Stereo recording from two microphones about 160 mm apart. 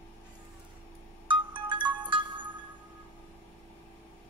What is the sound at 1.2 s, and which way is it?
Music, 30° right (ahead or behind).